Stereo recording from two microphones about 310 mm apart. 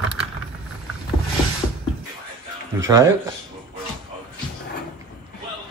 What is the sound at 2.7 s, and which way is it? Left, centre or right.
Speech, centre.